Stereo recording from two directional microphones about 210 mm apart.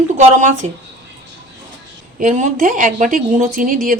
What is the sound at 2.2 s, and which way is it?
A woman's voice, 35° right (ahead or behind).